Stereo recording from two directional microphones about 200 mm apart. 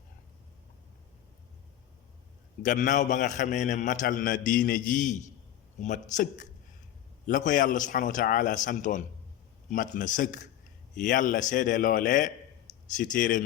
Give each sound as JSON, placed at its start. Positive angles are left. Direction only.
{"t": 2.6, "sound": "a man's voice", "side_deg": 40}